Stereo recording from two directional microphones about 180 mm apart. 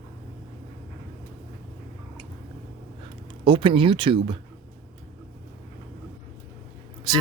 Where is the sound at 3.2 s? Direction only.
30° right (ahead or behind).